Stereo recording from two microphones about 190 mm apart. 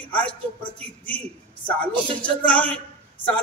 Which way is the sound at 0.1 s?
25° left (ahead or behind).